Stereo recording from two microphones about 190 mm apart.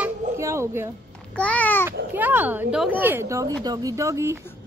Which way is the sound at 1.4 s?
5° left (ahead or behind).